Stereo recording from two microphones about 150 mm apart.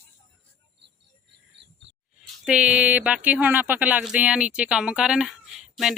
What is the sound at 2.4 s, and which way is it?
Speech, 5° right (ahead or behind).